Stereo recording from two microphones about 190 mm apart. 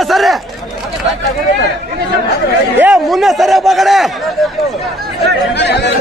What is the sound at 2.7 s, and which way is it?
Speech, 5° right (ahead or behind).